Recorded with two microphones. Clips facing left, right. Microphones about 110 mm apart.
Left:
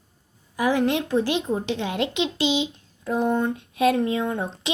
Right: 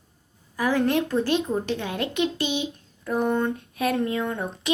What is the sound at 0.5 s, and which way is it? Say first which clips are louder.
A woman's voice: left 1 dB; 15° left (ahead or behind).